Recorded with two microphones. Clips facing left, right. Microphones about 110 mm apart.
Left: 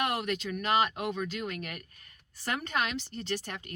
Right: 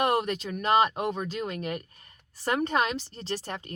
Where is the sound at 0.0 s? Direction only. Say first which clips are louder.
Right 5 dB; 35° right (ahead or behind).